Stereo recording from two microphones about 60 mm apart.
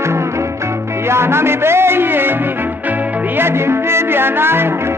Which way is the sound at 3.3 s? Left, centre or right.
Right.